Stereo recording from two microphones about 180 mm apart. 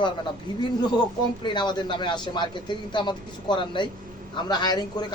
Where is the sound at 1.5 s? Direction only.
25° left (ahead or behind).